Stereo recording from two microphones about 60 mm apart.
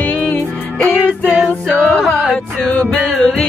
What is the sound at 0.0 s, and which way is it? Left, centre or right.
Music, left.